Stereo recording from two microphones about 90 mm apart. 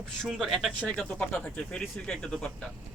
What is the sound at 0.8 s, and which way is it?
Speech, 10° left (ahead or behind).